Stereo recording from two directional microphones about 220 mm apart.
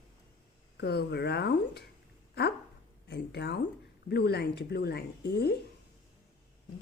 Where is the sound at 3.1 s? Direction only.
50° left (ahead or behind).